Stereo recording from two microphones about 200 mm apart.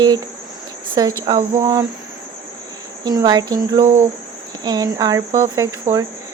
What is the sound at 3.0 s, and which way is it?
Speech, 20° right (ahead or behind).